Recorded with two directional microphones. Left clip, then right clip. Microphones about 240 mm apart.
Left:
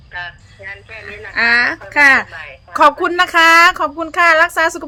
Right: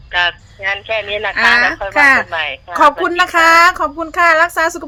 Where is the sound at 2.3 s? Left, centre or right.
Right.